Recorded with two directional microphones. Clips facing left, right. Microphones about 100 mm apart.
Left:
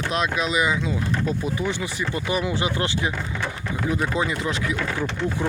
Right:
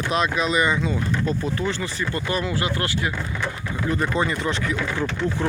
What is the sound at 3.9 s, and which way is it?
Speech, 5° left (ahead or behind).